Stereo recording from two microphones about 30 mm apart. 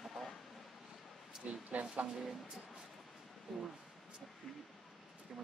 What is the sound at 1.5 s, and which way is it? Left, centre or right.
Speech, right.